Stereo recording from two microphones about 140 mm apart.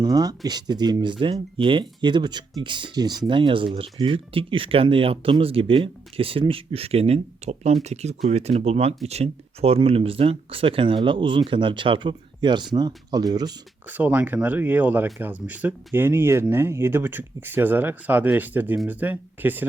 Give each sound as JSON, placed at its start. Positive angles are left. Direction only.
{"t": 0.0, "sound": "speech", "side_deg": -25}
{"t": 13.8, "sound": "speech", "side_deg": -10}